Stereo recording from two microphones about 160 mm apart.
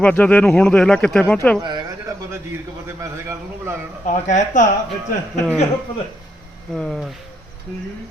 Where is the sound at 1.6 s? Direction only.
30° right (ahead or behind).